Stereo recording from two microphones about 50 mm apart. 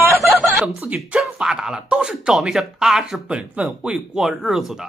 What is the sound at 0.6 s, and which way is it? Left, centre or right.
Speech, right.